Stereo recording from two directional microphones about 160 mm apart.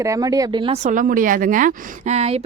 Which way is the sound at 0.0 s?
20° right (ahead or behind).